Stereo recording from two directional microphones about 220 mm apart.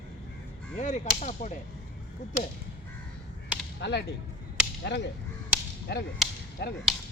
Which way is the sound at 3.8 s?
50° left (ahead or behind).